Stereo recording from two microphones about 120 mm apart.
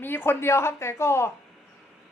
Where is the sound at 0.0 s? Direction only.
20° left (ahead or behind).